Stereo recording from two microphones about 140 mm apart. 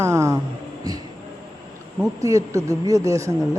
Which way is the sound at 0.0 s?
20° right (ahead or behind).